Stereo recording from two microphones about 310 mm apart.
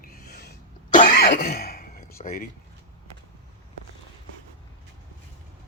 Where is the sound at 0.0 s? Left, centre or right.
Left.